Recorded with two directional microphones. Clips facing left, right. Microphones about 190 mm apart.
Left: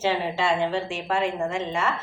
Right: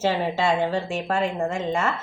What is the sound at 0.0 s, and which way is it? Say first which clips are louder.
Speech: right 2 dB; 40° right (ahead or behind).